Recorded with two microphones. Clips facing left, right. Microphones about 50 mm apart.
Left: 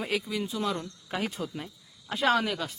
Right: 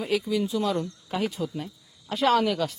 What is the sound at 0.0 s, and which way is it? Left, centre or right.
Speech, centre.